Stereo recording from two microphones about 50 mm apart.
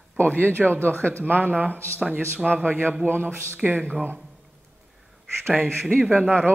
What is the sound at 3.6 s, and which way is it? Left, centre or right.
Speech, right.